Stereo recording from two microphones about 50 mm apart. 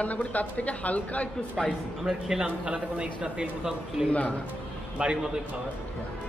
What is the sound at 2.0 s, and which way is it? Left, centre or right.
A man's voice, centre.